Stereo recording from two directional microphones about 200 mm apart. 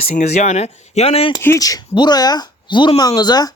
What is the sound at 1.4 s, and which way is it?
Speech, 15° left (ahead or behind).